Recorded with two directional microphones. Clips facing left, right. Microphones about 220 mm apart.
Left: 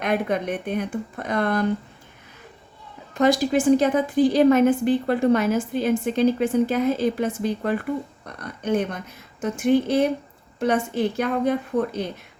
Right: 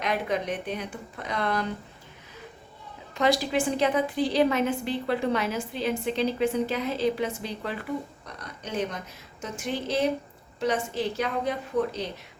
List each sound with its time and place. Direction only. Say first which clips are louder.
0.0 s a woman's voice: left 5 dB; 55° left (ahead or behind)
3.2 s a woman's voice: left 5 dB; 45° left (ahead or behind)